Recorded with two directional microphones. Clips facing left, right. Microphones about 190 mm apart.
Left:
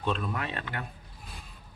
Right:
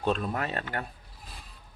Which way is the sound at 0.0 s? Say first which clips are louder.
Right 3 dB; 40° right (ahead or behind).